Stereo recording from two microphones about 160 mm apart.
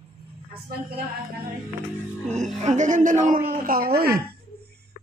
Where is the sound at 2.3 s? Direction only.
50° right (ahead or behind); by 4.2 s 75° right (ahead or behind).